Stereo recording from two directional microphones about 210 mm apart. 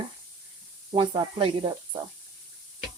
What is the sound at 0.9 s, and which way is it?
Speech, 25° right (ahead or behind).